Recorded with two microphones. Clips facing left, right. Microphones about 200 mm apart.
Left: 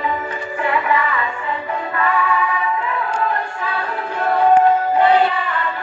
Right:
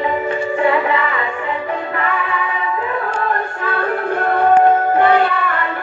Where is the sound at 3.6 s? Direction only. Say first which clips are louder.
Right 5 dB; 55° right (ahead or behind).